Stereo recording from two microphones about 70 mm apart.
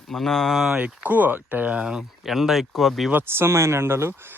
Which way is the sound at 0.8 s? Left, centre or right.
Right.